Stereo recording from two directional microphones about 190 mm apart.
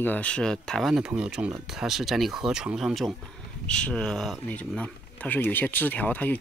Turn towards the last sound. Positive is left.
turn(degrees=10)  # may be behind; listen again after turning